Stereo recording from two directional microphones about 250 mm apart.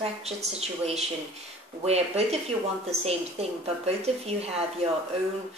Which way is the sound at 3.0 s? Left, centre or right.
Right.